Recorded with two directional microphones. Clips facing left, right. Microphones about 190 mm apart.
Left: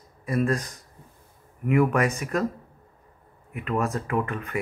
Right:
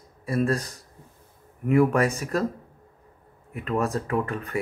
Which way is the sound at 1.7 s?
35° right (ahead or behind).